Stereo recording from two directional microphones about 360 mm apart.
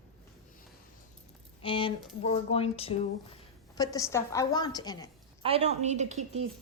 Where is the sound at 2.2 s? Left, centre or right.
Centre.